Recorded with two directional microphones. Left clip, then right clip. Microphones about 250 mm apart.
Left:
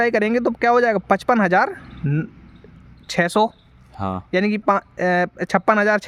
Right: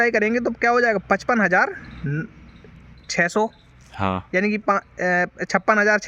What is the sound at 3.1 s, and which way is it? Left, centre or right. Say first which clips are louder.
Speech: left 2 dB; left.